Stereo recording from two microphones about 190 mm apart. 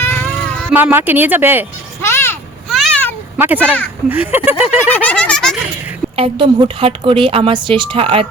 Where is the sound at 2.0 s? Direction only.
10° left (ahead or behind).